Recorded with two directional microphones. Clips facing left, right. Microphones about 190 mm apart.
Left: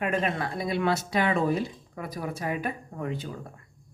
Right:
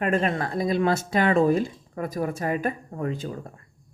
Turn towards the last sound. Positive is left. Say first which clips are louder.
# right 3 dB
turn(degrees=-45)  # may be behind; listen again after turning